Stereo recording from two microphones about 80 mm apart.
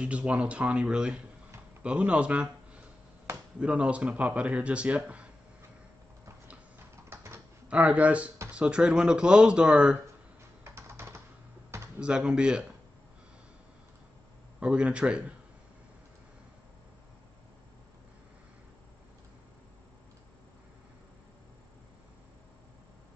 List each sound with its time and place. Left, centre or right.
0.0 s speech: centre
7.1 s typing: right
7.6 s speech: centre
10.6 s computer keyboard: right
12.0 s speech: centre
14.6 s speech: centre